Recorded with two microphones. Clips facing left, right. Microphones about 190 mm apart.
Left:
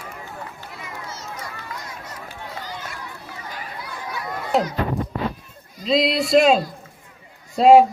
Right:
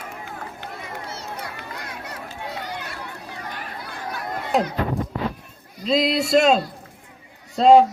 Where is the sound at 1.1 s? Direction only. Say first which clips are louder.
Right 1 dB; 60° right (ahead or behind).